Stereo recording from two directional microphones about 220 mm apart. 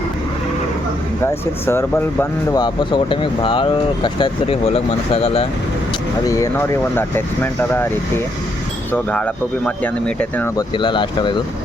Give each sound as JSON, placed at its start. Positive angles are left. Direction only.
{"t": 1.2, "sound": "speech", "side_deg": 10}
{"t": 2.6, "sound": "speech", "side_deg": 20}
{"t": 6.2, "sound": "speech", "side_deg": 15}
{"t": 10.8, "sound": "speech", "side_deg": 20}